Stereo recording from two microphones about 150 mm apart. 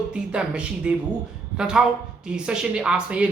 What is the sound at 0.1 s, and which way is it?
Speech, 5° right (ahead or behind).